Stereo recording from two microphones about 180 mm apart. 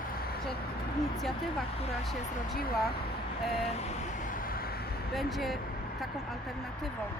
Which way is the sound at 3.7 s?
40° left (ahead or behind).